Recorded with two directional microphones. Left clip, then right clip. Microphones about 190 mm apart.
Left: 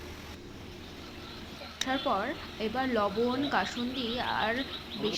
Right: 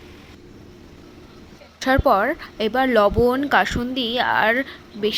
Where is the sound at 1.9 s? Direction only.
50° right (ahead or behind).